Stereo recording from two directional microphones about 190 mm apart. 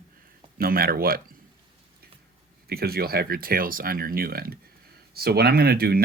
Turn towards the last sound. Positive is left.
turn(degrees=-55)  # may be behind; listen again after turning